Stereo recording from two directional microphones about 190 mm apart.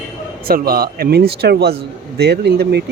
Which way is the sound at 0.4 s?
50° right (ahead or behind).